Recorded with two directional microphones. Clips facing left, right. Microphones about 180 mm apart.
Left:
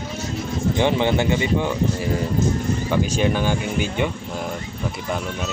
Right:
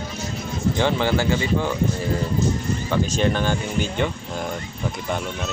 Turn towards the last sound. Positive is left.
turn(degrees=10)  # may be behind; listen again after turning